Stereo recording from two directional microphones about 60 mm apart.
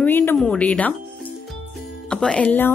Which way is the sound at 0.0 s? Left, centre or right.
Left.